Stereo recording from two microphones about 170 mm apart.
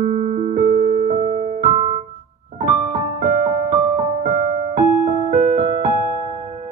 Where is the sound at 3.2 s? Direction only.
55° right (ahead or behind).